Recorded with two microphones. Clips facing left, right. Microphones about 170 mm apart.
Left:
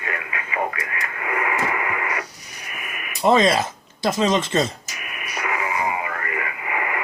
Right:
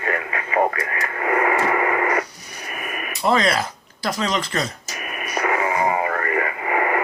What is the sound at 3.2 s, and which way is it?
Speech, 20° left (ahead or behind).